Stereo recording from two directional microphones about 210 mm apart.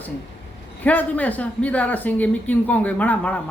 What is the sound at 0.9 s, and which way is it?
Speech, 5° left (ahead or behind).